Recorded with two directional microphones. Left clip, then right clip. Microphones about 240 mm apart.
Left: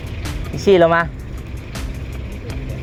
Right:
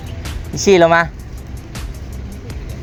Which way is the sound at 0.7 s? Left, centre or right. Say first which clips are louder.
Right 2 dB; centre.